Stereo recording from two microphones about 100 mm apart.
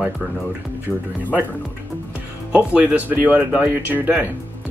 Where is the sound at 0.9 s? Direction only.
Centre (ahead or behind).